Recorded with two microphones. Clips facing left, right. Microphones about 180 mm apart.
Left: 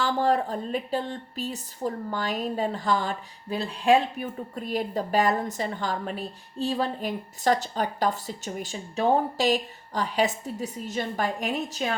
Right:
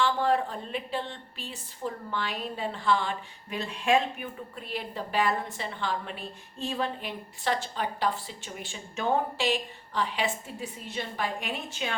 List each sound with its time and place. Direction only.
0.0 s a woman's voice: 40° left (ahead or behind)